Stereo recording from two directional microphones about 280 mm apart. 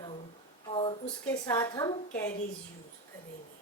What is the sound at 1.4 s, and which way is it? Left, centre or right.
Speech, centre.